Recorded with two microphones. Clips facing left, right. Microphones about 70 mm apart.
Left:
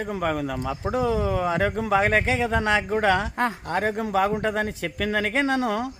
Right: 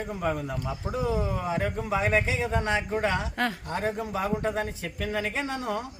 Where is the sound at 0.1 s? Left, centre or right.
Left.